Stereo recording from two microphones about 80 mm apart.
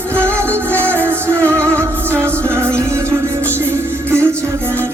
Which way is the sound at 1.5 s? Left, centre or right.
Right.